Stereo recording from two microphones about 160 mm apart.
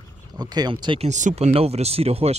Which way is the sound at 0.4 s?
25° right (ahead or behind).